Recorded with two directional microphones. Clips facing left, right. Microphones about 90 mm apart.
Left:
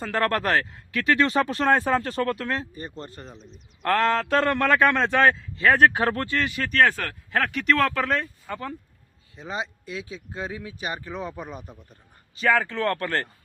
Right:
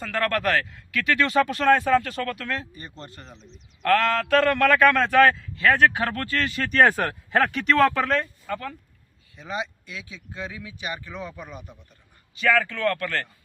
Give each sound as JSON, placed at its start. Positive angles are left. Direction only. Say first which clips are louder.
{"t": 0.0, "sound": "speech", "louder": "left 1 dB", "side_deg": 30}
{"t": 3.3, "sound": "speech", "louder": "left 2 dB", "side_deg": 45}
{"t": 3.8, "sound": "a man's voice", "louder": "right 1 dB", "side_deg": 25}
{"t": 6.1, "sound": "speech", "louder": "left 1 dB", "side_deg": 20}
{"t": 6.6, "sound": "speech", "louder": "right 2 dB", "side_deg": 0}
{"t": 6.8, "sound": "speech", "louder": "right 3 dB", "side_deg": -20}
{"t": 7.3, "sound": "speech", "louder": "right 1 dB", "side_deg": -5}
{"t": 8.5, "sound": "speech", "louder": "right 3 dB", "side_deg": 15}
{"t": 9.3, "sound": "speech", "louder": "right 1 dB", "side_deg": 30}